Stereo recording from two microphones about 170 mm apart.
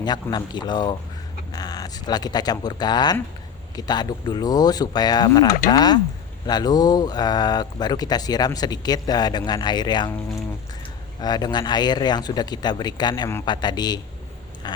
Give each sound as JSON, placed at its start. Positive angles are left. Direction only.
{"t": 0.0, "sound": "speech", "side_deg": 25}